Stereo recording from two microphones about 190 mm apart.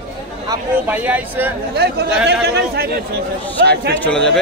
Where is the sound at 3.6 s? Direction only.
60° right (ahead or behind).